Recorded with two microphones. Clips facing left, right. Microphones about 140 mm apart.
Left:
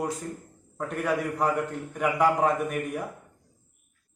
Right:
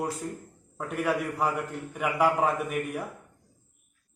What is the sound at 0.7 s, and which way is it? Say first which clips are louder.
A man's voice: left 1 dB; 5° right (ahead or behind).